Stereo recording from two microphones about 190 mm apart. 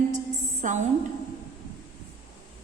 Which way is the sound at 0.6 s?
40° right (ahead or behind).